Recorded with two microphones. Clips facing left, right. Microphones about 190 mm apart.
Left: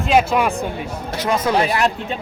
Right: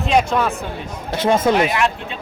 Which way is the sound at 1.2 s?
25° right (ahead or behind).